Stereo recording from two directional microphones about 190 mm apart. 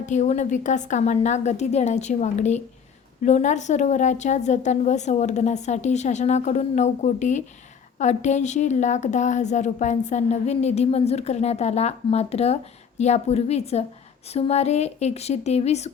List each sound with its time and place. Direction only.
0.0 s speech: 40° left (ahead or behind)